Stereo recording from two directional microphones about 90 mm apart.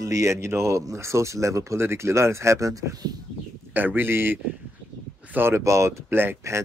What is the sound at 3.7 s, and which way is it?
Speech, 20° right (ahead or behind).